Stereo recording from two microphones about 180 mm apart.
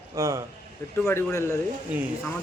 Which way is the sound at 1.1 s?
15° left (ahead or behind).